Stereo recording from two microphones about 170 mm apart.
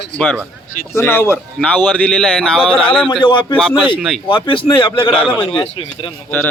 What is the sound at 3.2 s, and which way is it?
A man's voice, 30° left (ahead or behind).